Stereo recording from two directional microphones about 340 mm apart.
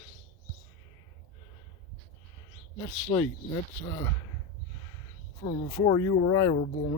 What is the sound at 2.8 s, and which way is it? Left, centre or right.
Speech, centre.